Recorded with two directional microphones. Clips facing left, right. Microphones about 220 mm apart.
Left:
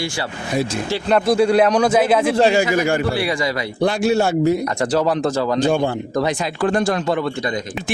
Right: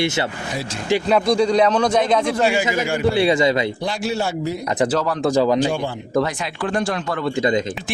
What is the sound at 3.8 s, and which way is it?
Speech, 55° left (ahead or behind).